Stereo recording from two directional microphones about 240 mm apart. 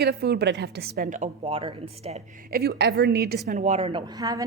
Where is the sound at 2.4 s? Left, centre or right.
Right.